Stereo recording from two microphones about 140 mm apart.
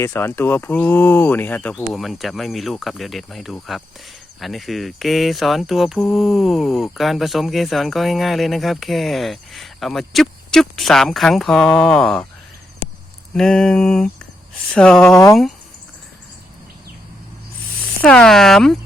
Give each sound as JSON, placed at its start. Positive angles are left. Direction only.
{"t": 0.0, "sound": "speech", "side_deg": 15}
{"t": 1.9, "sound": "speech", "side_deg": 0}
{"t": 13.3, "sound": "speech", "side_deg": 5}
{"t": 18.0, "sound": "speech", "side_deg": 5}